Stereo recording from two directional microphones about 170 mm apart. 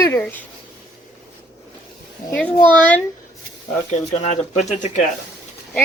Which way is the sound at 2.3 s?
10° left (ahead or behind).